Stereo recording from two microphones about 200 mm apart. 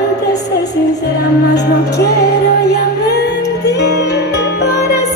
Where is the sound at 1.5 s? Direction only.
55° left (ahead or behind).